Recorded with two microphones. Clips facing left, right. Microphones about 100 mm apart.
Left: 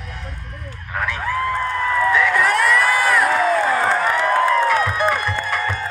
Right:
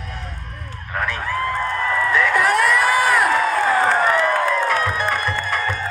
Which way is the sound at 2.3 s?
5° right (ahead or behind).